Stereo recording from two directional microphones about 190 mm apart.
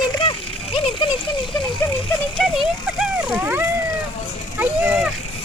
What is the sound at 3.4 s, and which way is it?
Vehicle, 10° right (ahead or behind).